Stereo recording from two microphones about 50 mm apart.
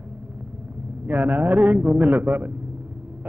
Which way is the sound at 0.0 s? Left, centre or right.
Right.